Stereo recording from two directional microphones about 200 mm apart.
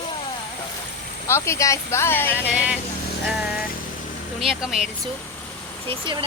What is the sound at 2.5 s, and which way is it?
Speech, 5° right (ahead or behind).